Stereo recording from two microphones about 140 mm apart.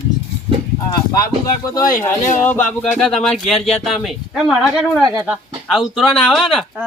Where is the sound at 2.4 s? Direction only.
10° left (ahead or behind).